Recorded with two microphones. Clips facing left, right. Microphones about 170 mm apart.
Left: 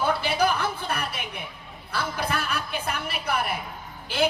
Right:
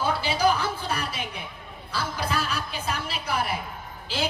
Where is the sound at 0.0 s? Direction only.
55° left (ahead or behind).